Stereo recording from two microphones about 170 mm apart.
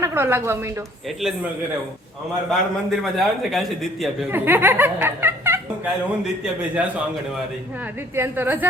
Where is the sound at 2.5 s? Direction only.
Centre (ahead or behind).